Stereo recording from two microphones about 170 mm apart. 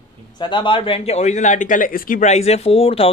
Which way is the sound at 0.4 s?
25° left (ahead or behind).